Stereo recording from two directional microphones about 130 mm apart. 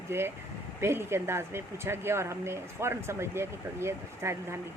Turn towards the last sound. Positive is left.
turn(degrees=-20)  # may be behind; listen again after turning